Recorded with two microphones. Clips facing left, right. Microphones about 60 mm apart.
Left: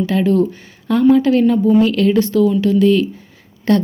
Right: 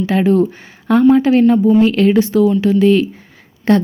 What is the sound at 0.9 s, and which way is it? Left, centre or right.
A woman's voice, right.